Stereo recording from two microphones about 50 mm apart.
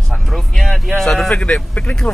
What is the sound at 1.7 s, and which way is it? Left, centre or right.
Speech, left.